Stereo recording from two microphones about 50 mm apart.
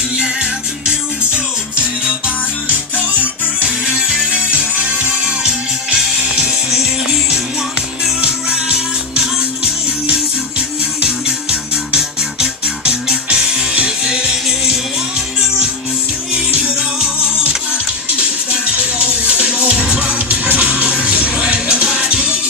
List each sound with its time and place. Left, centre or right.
1.8 s music: right
3.8 s music: centre
11.9 s music: centre
16.3 s music: centre
18.2 s music: right